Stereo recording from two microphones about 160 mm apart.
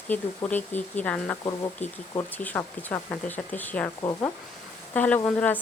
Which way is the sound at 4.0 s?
25° left (ahead or behind).